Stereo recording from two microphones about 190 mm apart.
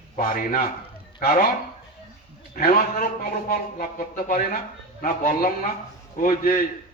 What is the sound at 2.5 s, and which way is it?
Speech, 50° left (ahead or behind).